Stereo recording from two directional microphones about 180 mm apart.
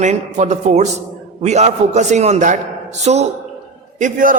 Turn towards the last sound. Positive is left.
turn(degrees=-45)  # may be behind; listen again after turning